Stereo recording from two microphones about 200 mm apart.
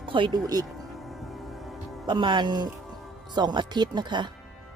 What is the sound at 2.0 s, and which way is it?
Speech, 25° right (ahead or behind).